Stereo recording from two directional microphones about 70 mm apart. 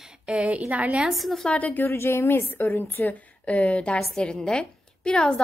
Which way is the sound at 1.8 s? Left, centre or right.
Left.